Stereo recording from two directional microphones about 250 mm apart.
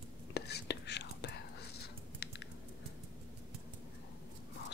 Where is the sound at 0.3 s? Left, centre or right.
Left.